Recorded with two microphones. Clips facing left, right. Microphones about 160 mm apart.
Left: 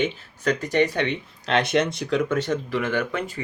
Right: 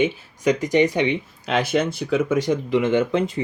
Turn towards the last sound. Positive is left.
turn(degrees=-20)  # may be behind; listen again after turning